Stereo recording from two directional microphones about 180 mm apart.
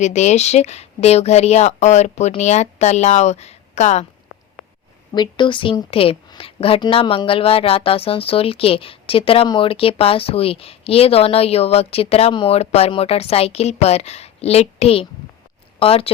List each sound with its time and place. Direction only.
0.0 s a woman's voice: 40° left (ahead or behind)
5.1 s a woman's voice: 25° left (ahead or behind)